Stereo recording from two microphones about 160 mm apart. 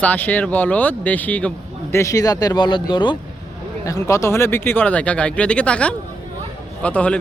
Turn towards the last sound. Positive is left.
turn(degrees=5)  # may be behind; listen again after turning